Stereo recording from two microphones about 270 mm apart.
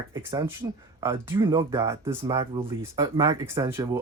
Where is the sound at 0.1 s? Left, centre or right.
Centre.